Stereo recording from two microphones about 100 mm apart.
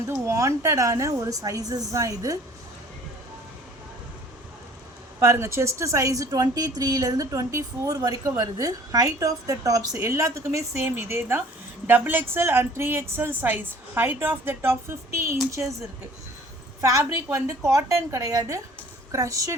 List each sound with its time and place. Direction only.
0.1 s speech: 30° right (ahead or behind)
5.2 s a woman's voice: 30° right (ahead or behind)
16.8 s speech: 35° right (ahead or behind)